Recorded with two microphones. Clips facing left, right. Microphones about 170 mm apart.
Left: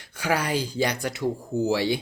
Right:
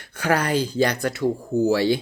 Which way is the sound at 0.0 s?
10° left (ahead or behind).